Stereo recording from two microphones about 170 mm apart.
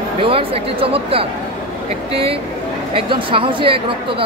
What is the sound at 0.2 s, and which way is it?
Speech, 35° right (ahead or behind).